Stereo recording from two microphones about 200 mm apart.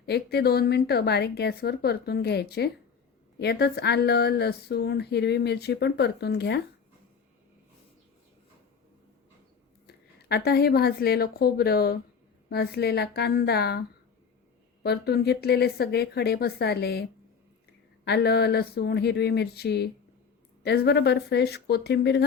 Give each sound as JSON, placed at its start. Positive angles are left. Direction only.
{"t": 0.0, "sound": "a woman's voice", "side_deg": 55}
{"t": 9.8, "sound": "a woman's voice", "side_deg": 55}
{"t": 14.8, "sound": "a woman's voice", "side_deg": 55}